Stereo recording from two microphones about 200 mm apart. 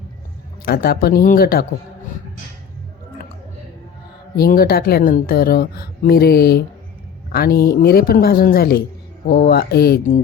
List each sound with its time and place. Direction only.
0.6 s a woman's voice: 50° left (ahead or behind)
4.4 s a woman's voice: 50° left (ahead or behind)